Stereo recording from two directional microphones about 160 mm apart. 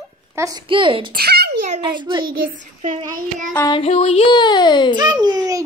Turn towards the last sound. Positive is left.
turn(degrees=-25)  # may be behind; listen again after turning